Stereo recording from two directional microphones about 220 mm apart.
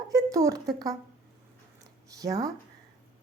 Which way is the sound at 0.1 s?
15° right (ahead or behind).